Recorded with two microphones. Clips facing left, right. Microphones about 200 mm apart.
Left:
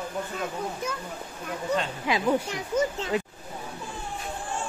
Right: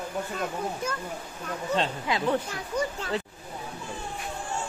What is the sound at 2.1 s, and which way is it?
Speech, 15° left (ahead or behind).